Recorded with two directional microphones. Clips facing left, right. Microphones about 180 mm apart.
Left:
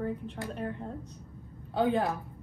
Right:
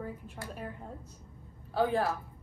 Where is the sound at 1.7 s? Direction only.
20° left (ahead or behind).